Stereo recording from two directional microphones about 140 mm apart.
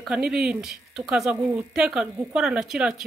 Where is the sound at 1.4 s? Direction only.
20° right (ahead or behind).